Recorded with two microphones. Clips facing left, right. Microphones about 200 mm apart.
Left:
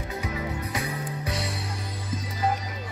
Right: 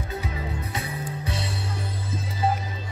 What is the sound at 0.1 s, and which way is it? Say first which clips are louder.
Music: left 2 dB; 30° right (ahead or behind).